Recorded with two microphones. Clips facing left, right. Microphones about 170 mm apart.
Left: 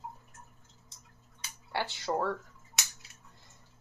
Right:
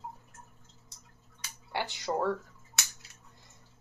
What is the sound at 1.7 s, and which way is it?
Speech, 15° right (ahead or behind).